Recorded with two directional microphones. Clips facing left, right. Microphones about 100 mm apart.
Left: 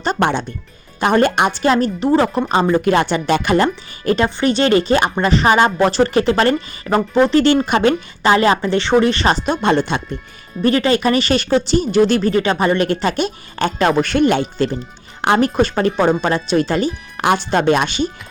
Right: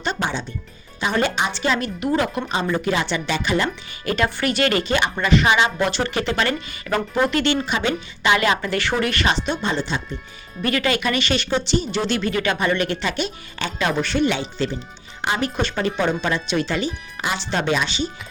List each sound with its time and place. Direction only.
0.2 s speech: 60° left (ahead or behind)
2.0 s speech: 35° left (ahead or behind)
2.5 s speech: 45° left (ahead or behind)
4.4 s speech: 30° left (ahead or behind)
9.2 s speech: 45° left (ahead or behind)
9.6 s speech: 60° left (ahead or behind)
10.6 s speech: 30° left (ahead or behind)
17.2 s speech: 55° left (ahead or behind)